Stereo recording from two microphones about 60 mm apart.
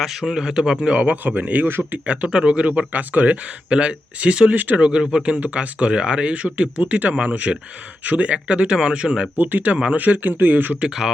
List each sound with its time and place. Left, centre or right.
0.0 s speech: centre; by 1.6 s right
1.6 s speech: right
2.0 s speech: centre
9.4 s speech: right
10.8 s speech: centre